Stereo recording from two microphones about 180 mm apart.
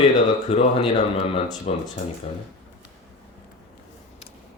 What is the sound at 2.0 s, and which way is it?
Speech, 40° left (ahead or behind).